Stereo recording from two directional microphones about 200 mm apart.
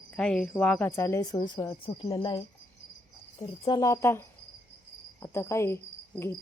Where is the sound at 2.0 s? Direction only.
20° left (ahead or behind).